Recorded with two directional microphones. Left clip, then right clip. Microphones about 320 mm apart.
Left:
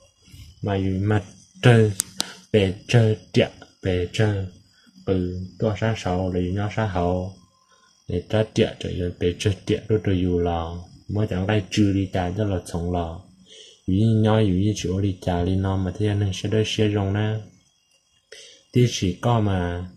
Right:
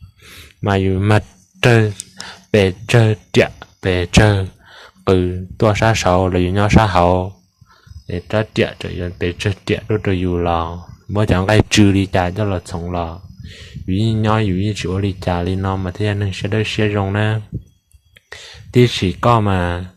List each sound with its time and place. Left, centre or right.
0.7 s speech: right
5.7 s speech: right
8.1 s speech: right